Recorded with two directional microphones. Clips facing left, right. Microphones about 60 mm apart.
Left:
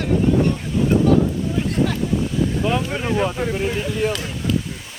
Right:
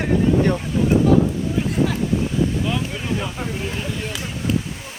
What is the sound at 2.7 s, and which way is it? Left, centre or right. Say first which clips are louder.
Speech: left 3 dB; left.